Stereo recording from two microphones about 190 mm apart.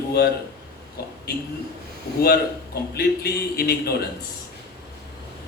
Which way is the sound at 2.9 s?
55° left (ahead or behind).